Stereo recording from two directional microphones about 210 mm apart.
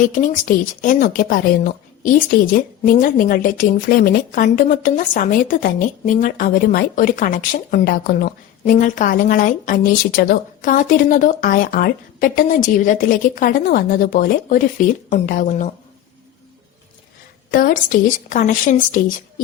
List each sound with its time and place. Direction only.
0.1 s speech: 40° left (ahead or behind)
17.5 s speech: 40° left (ahead or behind)